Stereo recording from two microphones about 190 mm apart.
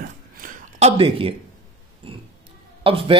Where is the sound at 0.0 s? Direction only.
45° right (ahead or behind); by 1.3 s 30° right (ahead or behind).